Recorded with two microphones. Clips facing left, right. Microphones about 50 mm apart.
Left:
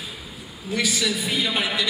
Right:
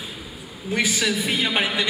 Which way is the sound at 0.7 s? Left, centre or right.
Right.